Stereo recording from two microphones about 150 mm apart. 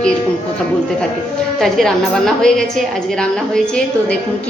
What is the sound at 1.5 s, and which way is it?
A woman's voice, 5° left (ahead or behind).